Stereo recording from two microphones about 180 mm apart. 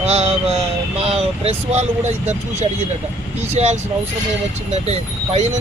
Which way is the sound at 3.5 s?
35° right (ahead or behind).